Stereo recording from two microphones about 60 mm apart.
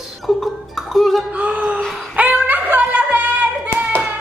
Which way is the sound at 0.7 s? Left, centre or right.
Centre.